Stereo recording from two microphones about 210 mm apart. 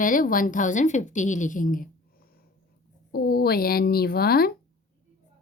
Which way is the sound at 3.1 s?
50° left (ahead or behind).